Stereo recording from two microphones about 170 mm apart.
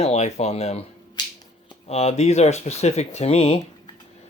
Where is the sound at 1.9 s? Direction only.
40° left (ahead or behind).